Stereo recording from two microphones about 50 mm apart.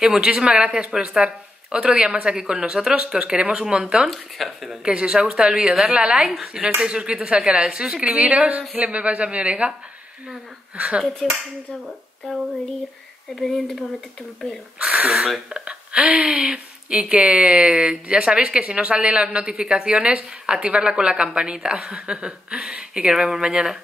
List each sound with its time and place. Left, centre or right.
0.0 s speech: centre
4.1 s speech: centre
4.8 s speech: centre
8.5 s speech: right
11.2 s speech: centre
13.4 s speech: centre
14.8 s speech: right
15.1 s speech: centre
15.6 s speech: right
16.3 s speech: centre
16.5 s speech: right